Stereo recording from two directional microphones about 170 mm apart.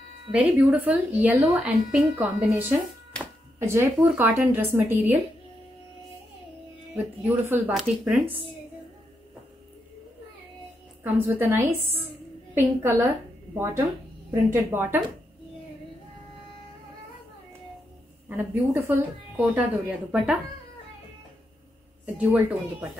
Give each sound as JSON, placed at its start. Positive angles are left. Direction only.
{"t": 0.3, "sound": "a woman's voice", "side_deg": -10}
{"t": 7.2, "sound": "a woman's voice", "side_deg": -10}
{"t": 11.1, "sound": "a woman's voice", "side_deg": -15}
{"t": 14.3, "sound": "a woman's voice", "side_deg": -15}
{"t": 18.3, "sound": "a woman's voice", "side_deg": -10}
{"t": 22.0, "sound": "a woman's voice", "side_deg": -10}